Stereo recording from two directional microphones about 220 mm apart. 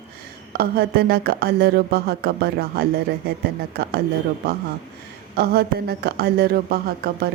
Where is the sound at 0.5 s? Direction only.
45° right (ahead or behind).